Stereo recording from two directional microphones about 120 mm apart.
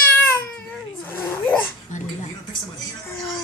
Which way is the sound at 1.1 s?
15° left (ahead or behind).